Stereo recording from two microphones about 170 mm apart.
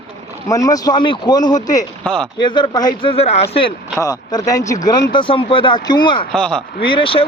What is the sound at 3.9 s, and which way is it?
Speech, 20° left (ahead or behind).